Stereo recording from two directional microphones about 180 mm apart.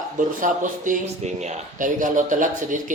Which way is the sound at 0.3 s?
45° right (ahead or behind).